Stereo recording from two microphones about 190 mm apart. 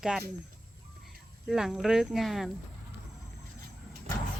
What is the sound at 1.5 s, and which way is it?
Speech, centre (ahead or behind).